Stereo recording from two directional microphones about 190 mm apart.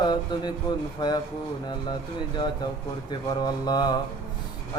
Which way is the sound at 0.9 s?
20° left (ahead or behind).